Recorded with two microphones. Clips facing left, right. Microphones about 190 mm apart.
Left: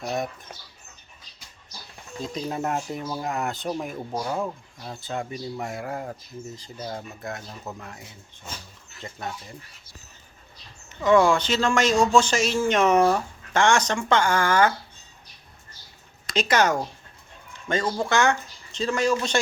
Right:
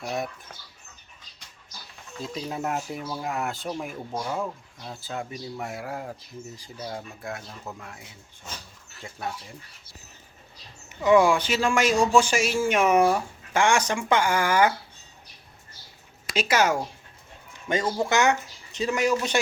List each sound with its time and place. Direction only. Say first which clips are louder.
0.0 s a man's voice: left 2 dB; 10° right (ahead or behind)
2.2 s a man's voice: left 2 dB; 5° right (ahead or behind)
4.1 s a man's voice: left 2 dB; 5° left (ahead or behind)
7.4 s speech: left 2 dB; 5° left (ahead or behind)
11.0 s a man's voice: even; 15° right (ahead or behind)
16.2 s a man's voice: left 1 dB; 10° right (ahead or behind)